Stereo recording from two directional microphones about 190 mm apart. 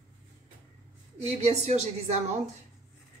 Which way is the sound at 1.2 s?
35° right (ahead or behind).